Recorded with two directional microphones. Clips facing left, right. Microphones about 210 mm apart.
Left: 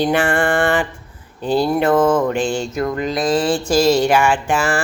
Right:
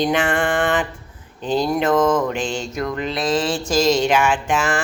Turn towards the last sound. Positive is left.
turn(degrees=10)  # may be behind; listen again after turning